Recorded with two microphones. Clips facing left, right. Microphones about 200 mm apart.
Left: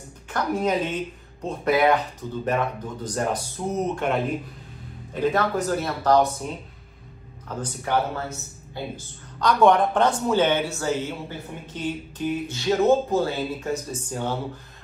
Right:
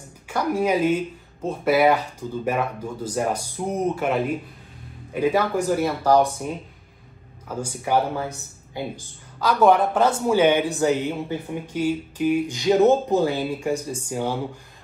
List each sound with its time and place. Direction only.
0.3 s speech: 10° right (ahead or behind)
7.4 s speech: 10° right (ahead or behind)